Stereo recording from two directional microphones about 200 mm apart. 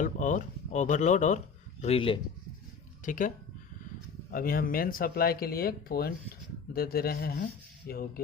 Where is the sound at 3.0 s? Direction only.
40° left (ahead or behind).